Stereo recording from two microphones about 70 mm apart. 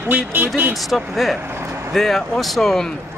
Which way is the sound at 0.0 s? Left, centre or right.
Right.